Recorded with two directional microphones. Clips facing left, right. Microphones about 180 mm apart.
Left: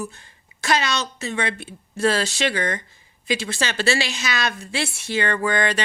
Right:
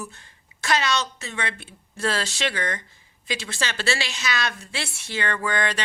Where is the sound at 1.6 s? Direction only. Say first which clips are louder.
Left 6 dB; 10° left (ahead or behind).